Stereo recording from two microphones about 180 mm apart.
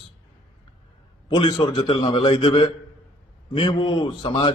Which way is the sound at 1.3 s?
25° left (ahead or behind).